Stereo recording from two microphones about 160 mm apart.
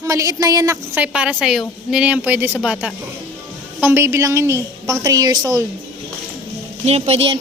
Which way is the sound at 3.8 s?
15° right (ahead or behind).